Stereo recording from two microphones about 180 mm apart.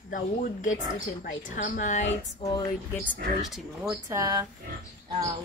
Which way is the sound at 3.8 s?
15° right (ahead or behind).